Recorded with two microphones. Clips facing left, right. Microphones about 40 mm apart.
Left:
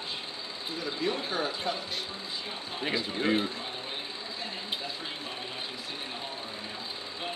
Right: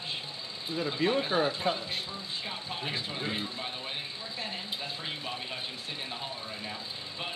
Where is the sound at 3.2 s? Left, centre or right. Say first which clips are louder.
Left 10 dB; left.